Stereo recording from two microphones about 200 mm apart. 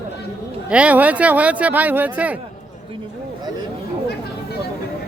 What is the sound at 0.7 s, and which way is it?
Speech, 5° right (ahead or behind).